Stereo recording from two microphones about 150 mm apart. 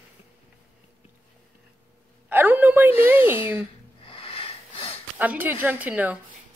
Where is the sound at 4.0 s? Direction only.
35° left (ahead or behind).